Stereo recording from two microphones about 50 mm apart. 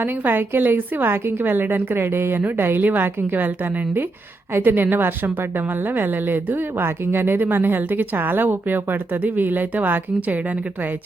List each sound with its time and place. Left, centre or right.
0.0 s a woman's voice: right